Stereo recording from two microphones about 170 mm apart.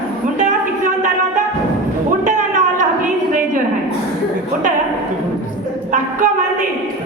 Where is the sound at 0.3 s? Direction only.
50° right (ahead or behind).